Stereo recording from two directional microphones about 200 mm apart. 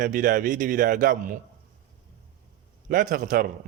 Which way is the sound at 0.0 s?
45° right (ahead or behind).